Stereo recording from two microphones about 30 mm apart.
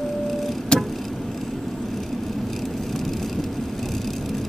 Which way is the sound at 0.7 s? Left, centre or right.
Left.